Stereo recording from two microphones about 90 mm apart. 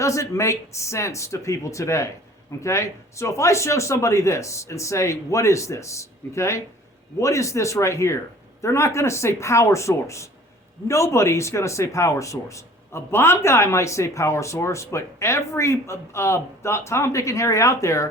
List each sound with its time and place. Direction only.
0.0 s speech: 35° left (ahead or behind)